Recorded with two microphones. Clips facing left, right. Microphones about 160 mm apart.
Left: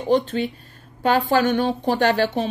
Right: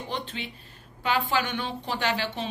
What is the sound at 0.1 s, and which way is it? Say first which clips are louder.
Speech: left 18 dB; 45° left (ahead or behind).